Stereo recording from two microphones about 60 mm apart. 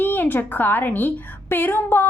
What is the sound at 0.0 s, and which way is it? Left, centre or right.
A woman's voice, left.